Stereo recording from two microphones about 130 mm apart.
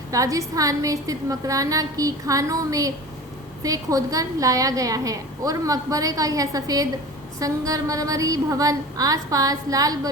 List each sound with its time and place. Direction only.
0.1 s a woman's voice: 25° right (ahead or behind)